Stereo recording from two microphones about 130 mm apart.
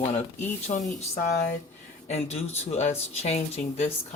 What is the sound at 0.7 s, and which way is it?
Speech, 70° left (ahead or behind).